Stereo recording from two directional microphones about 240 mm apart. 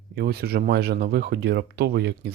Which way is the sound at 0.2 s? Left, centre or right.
Right.